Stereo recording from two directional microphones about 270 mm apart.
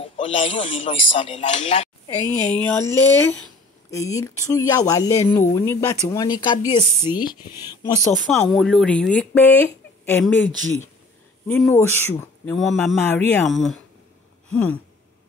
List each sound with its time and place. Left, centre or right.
0.2 s speech: centre
2.2 s speech: centre
2.5 s speech: centre
8.3 s speech: centre
11.4 s speech: centre
14.5 s a sound: centre